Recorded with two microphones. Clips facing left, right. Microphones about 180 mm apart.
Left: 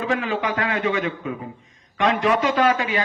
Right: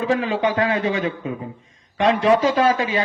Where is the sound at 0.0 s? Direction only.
30° right (ahead or behind).